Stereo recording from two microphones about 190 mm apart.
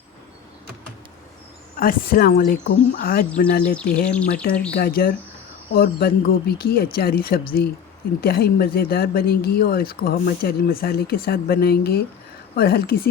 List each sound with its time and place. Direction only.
1.7 s speech: 50° left (ahead or behind)
3.8 s speech: 5° left (ahead or behind)
4.7 s speech: 55° left (ahead or behind)